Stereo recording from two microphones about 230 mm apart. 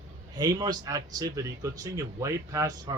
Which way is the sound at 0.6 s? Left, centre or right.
Centre.